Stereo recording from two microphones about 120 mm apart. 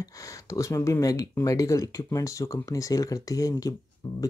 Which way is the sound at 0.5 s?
25° left (ahead or behind).